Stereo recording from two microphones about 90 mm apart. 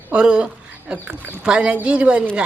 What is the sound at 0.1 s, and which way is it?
A woman's voice, 10° right (ahead or behind).